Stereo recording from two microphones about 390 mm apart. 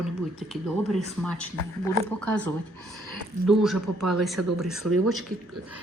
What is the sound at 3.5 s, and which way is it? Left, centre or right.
A woman's voice, centre.